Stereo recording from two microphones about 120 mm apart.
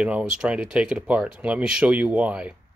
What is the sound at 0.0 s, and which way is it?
Speech, 10° right (ahead or behind).